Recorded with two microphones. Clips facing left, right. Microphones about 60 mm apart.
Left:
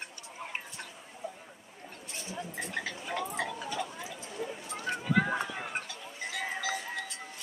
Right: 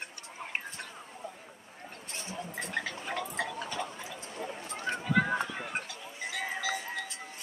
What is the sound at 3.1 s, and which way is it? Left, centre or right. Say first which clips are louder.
Tick-tock: left 1 dB; right.